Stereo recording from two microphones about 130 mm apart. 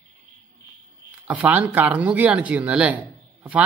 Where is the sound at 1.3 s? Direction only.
10° right (ahead or behind).